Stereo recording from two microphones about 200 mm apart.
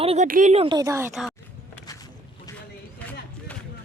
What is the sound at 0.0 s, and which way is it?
Speech, 30° right (ahead or behind).